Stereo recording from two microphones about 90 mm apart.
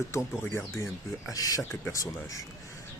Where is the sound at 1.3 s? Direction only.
40° left (ahead or behind).